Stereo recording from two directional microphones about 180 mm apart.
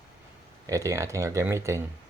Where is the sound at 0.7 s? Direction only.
15° right (ahead or behind).